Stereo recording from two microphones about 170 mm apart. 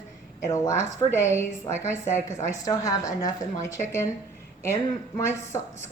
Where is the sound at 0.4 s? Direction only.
20° left (ahead or behind).